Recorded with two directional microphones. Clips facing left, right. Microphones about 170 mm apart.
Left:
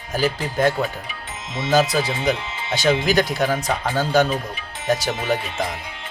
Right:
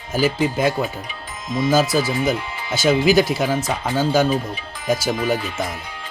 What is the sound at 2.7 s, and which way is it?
Speech, 5° right (ahead or behind).